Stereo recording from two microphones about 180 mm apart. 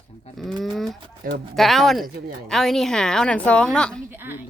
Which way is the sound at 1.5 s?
Centre (ahead or behind).